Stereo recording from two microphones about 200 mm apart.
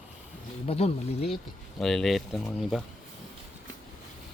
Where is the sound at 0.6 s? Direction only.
30° left (ahead or behind).